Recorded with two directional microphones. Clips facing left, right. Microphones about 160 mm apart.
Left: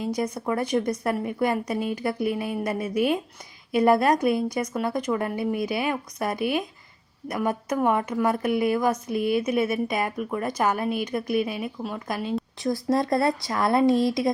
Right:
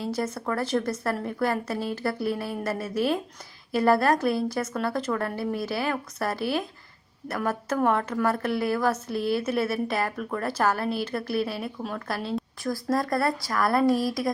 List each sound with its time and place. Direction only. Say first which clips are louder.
0.2 s a woman's voice: left 1 dB; 15° left (ahead or behind)
12.6 s speech: left 3 dB; 25° left (ahead or behind)